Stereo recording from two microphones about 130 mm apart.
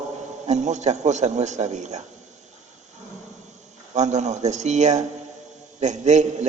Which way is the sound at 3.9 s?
60° right (ahead or behind).